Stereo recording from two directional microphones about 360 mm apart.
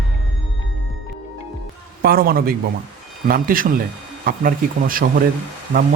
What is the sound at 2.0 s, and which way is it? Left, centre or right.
Speech, right.